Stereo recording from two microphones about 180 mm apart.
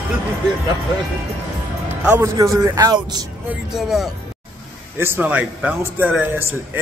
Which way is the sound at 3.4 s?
5° right (ahead or behind).